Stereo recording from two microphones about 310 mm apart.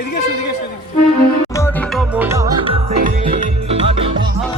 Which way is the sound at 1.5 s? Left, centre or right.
Centre.